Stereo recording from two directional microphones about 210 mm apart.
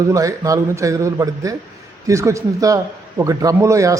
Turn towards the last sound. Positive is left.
turn(degrees=-15)  # may be behind; listen again after turning